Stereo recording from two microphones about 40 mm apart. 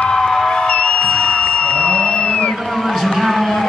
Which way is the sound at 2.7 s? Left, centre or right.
Centre.